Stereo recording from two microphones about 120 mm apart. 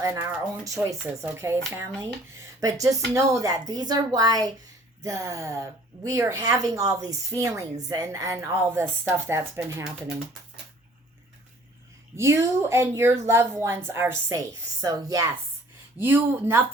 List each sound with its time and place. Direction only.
0.0 s a woman's voice: 30° right (ahead or behind)
12.1 s a woman's voice: 20° right (ahead or behind)